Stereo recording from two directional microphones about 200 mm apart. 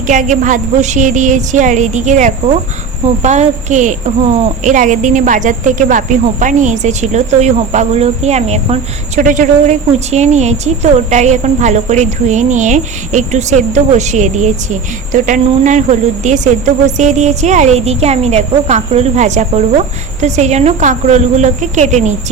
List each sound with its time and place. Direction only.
0.1 s speech: 40° right (ahead or behind)